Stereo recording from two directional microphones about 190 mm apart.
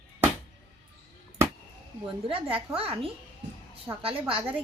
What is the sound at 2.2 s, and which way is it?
A woman's voice, 30° right (ahead or behind).